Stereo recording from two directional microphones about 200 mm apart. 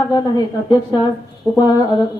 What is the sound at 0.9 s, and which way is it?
Speech, 20° left (ahead or behind).